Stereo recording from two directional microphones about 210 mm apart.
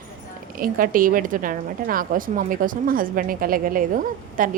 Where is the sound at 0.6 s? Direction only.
40° right (ahead or behind).